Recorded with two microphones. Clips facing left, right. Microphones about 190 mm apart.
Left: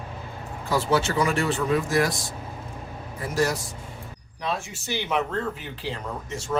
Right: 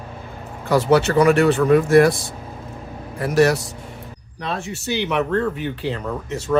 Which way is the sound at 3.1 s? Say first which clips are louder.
Right 9 dB; 70° right (ahead or behind).